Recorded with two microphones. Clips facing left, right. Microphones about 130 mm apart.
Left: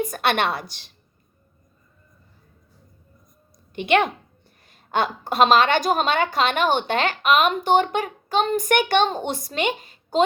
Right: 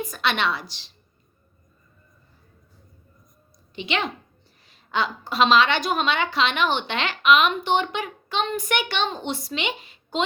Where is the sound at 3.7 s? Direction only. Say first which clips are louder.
Left 8 dB; 50° left (ahead or behind).